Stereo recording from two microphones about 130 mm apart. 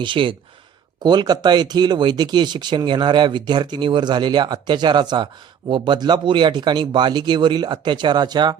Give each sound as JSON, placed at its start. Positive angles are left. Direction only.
{"t": 0.0, "sound": "speech", "side_deg": -40}